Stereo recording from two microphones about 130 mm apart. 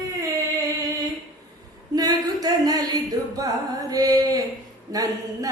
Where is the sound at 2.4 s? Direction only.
30° right (ahead or behind).